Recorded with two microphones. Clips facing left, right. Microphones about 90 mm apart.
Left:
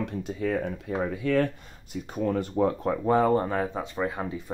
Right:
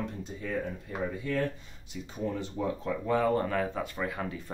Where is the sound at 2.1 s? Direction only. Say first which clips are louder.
Left 7 dB; 60° left (ahead or behind).